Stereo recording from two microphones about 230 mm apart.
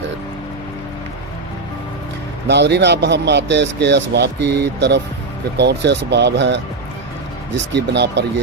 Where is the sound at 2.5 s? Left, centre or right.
Right.